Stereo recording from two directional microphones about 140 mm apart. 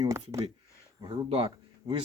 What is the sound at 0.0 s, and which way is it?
Speech, 20° right (ahead or behind).